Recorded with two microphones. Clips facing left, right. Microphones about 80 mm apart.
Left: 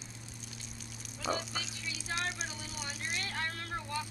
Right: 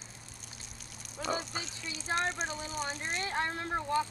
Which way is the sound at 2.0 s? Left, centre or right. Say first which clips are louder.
Right 6 dB; right.